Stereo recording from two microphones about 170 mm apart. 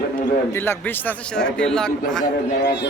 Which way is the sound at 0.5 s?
15° left (ahead or behind).